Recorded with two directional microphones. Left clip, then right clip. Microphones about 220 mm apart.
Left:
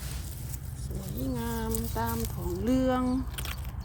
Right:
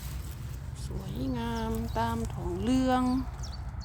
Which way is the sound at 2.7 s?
5° right (ahead or behind).